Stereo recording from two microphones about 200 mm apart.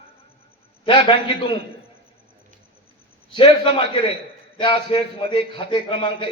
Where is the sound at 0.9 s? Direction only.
25° left (ahead or behind).